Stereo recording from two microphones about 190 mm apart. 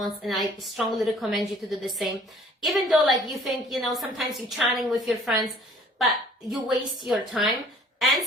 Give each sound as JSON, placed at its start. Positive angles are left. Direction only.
{"t": 0.0, "sound": "a woman's voice", "side_deg": 0}